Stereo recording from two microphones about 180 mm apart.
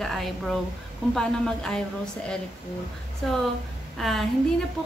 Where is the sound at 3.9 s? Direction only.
Centre (ahead or behind).